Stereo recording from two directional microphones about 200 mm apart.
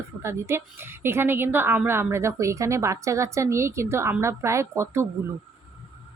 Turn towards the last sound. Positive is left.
turn(degrees=-15)  # may be behind; listen again after turning